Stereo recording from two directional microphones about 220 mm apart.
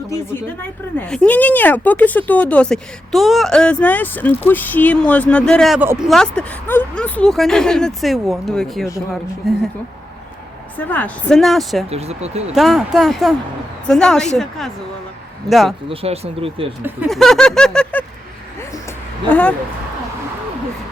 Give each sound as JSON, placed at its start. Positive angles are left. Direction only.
{"t": 0.9, "sound": "speech", "side_deg": 5}
{"t": 10.8, "sound": "speech", "side_deg": 5}
{"t": 11.9, "sound": "speech", "side_deg": -30}
{"t": 12.5, "sound": "speech", "side_deg": 0}
{"t": 15.4, "sound": "speech", "side_deg": 0}
{"t": 15.9, "sound": "speech", "side_deg": -25}
{"t": 16.8, "sound": "speech", "side_deg": -5}
{"t": 19.3, "sound": "speech", "side_deg": 5}